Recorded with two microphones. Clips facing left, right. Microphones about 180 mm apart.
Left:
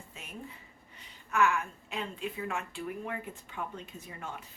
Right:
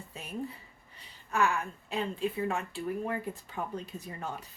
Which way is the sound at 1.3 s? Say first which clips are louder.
Left 1 dB; 35° right (ahead or behind).